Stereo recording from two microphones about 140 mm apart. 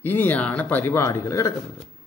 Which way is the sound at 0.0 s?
15° left (ahead or behind).